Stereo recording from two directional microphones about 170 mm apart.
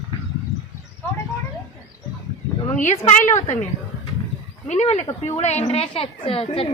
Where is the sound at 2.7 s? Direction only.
40° left (ahead or behind).